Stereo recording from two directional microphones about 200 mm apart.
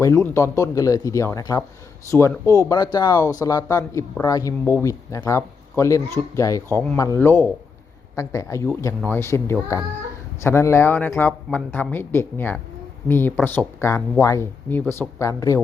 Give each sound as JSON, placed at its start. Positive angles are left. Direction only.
{"t": 0.0, "sound": "speech", "side_deg": 15}